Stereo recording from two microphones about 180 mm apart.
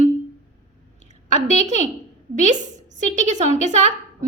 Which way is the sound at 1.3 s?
40° right (ahead or behind).